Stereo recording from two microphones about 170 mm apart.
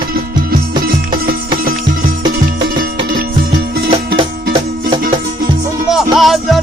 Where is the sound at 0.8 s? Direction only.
60° right (ahead or behind).